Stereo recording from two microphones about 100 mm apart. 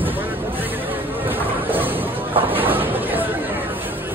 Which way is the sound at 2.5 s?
20° right (ahead or behind).